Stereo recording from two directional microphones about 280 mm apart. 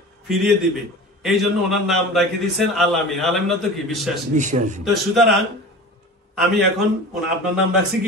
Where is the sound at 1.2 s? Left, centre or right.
Centre.